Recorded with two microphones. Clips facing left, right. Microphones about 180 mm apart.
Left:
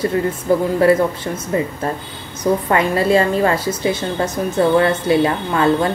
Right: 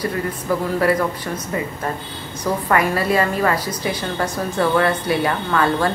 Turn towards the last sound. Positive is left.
turn(degrees=25)  # may be behind; listen again after turning